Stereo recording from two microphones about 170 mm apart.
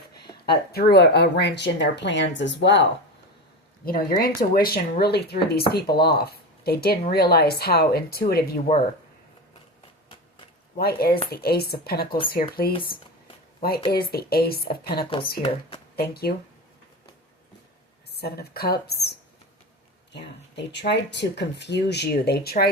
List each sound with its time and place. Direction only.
0.4 s speech: 65° left (ahead or behind); by 2.8 s 90° left
3.8 s speech: 60° left (ahead or behind)
8.7 s speech: 40° left (ahead or behind)
10.8 s speech: 65° left (ahead or behind)
18.2 s speech: 70° left (ahead or behind)
20.1 s speech: 90° left; by 22.7 s 65° left (ahead or behind)